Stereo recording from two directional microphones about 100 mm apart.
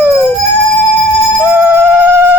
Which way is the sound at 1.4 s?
20° right (ahead or behind).